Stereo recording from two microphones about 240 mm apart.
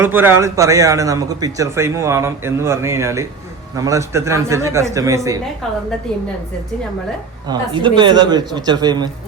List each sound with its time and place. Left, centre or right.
0.0 s a man's voice: centre
7.4 s a man's voice: centre